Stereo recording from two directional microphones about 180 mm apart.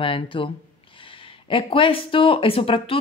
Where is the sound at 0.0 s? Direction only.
30° left (ahead or behind).